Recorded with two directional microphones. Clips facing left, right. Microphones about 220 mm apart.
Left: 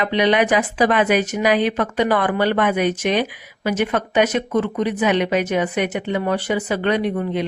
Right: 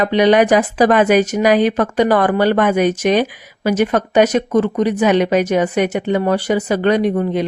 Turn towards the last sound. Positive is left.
turn(degrees=-40)  # may be behind; listen again after turning